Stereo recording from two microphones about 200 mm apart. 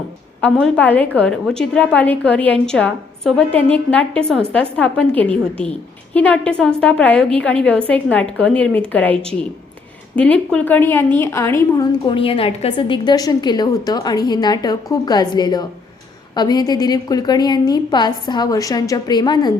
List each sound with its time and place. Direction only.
0.4 s a woman's voice: 5° left (ahead or behind)
10.2 s a woman's voice: 5° left (ahead or behind)